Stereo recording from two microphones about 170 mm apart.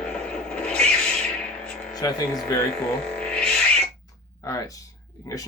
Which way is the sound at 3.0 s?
5° left (ahead or behind).